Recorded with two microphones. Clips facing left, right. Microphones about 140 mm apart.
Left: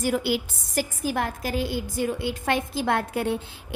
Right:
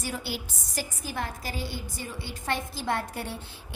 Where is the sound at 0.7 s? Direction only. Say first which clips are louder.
Left 8 dB; 50° left (ahead or behind).